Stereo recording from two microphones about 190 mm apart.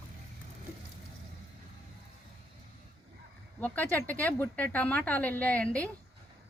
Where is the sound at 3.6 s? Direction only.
10° left (ahead or behind).